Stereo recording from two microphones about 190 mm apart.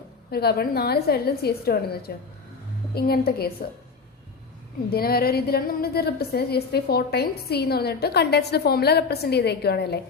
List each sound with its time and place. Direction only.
0.3 s a woman's voice: 55° left (ahead or behind)
4.9 s a woman's voice: 55° left (ahead or behind)